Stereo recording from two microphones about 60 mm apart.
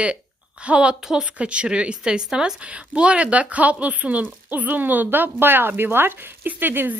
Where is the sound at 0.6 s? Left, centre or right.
Centre.